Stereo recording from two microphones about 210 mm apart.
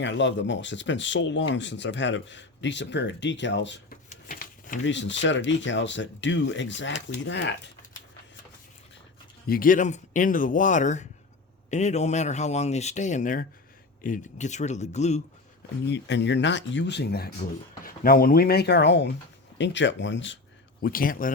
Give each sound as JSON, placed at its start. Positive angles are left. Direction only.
{"t": 0.0, "sound": "speech", "side_deg": 60}
{"t": 4.1, "sound": "a sound", "side_deg": 40}
{"t": 4.8, "sound": "speech", "side_deg": 60}
{"t": 9.5, "sound": "speech", "side_deg": 40}
{"t": 15.9, "sound": "speech", "side_deg": 55}
{"t": 20.8, "sound": "speech", "side_deg": 40}